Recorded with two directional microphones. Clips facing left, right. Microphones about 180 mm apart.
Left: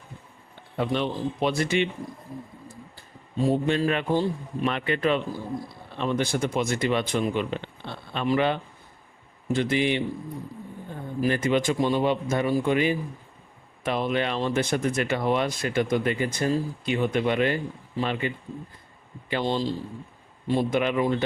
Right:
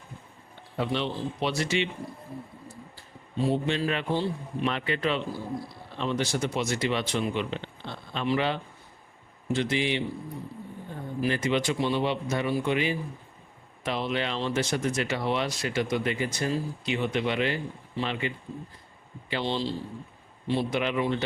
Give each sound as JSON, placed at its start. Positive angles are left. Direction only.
{"t": 0.8, "sound": "speech", "side_deg": 50}
{"t": 3.5, "sound": "speech", "side_deg": 45}
{"t": 11.2, "sound": "speech", "side_deg": 50}
{"t": 19.3, "sound": "speech", "side_deg": 45}